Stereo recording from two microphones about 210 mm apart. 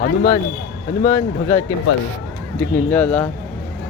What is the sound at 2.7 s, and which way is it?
Speech, 5° left (ahead or behind).